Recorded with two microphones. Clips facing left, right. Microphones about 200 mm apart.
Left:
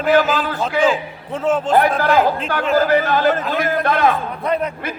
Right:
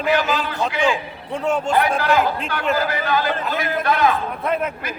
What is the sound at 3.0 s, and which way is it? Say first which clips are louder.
Speech: left 4 dB; 45° left (ahead or behind).